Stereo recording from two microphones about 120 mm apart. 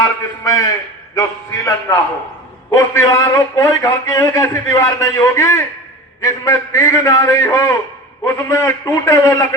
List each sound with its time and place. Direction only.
0.0 s a man's voice: 30° left (ahead or behind)